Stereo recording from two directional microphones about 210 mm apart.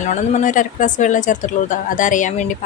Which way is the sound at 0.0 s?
35° left (ahead or behind).